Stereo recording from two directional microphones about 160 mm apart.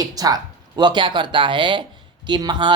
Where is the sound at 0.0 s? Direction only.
25° right (ahead or behind).